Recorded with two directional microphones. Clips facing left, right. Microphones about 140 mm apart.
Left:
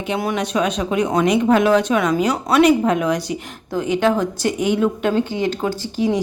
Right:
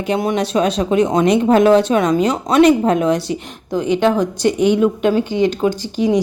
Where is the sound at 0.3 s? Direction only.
35° right (ahead or behind).